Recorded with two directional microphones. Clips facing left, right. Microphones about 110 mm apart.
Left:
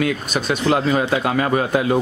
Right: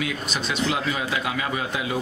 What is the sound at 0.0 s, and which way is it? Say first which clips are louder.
Speech: left 7 dB; 50° left (ahead or behind).